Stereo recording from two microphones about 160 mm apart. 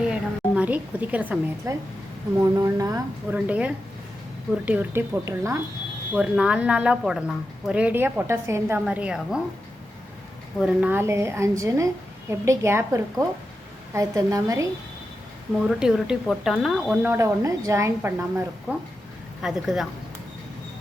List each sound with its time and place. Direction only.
0.0 s a woman's voice: 5° right (ahead or behind)
2.6 s a woman's voice: 20° right (ahead or behind)
3.3 s a woman's voice: 10° right (ahead or behind)
6.1 s a woman's voice: 5° right (ahead or behind)
10.6 s a woman's voice: 5° right (ahead or behind)
15.6 s a woman's voice: 5° right (ahead or behind)
19.4 s speech: 5° right (ahead or behind)